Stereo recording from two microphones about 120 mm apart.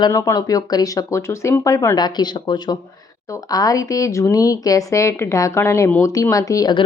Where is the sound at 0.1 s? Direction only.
25° left (ahead or behind).